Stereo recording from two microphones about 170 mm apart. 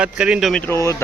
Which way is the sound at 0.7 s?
15° left (ahead or behind).